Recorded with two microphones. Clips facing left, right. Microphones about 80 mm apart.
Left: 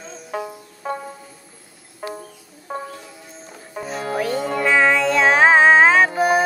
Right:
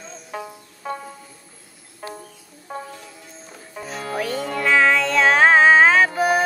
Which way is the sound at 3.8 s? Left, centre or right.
Centre.